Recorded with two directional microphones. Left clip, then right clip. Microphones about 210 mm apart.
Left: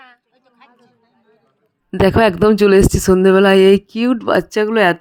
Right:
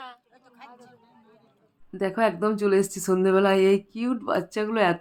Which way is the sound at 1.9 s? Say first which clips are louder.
Left 12 dB; 45° left (ahead or behind).